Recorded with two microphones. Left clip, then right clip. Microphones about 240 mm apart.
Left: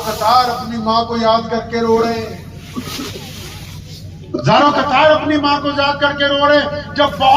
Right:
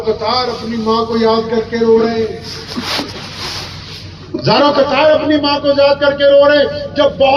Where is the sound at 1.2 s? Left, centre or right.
Left.